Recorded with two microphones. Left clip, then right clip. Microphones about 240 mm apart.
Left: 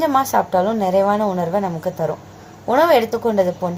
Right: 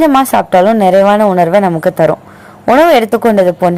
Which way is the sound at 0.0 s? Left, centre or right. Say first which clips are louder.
Right 8 dB; right.